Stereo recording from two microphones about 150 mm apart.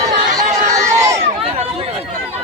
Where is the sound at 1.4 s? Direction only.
40° right (ahead or behind).